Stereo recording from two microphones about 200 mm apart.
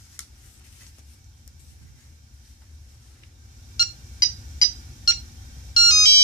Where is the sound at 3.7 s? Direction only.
15° left (ahead or behind).